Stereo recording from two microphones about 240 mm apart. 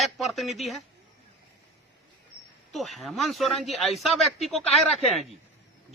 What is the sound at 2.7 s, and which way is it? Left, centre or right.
A man's voice, centre.